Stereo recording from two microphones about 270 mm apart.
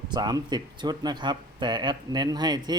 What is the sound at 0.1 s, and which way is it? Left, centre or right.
Speech, centre.